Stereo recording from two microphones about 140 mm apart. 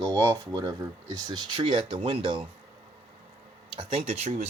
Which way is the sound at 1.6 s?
40° right (ahead or behind).